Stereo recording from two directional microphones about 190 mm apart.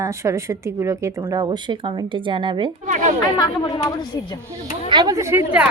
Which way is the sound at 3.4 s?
25° left (ahead or behind).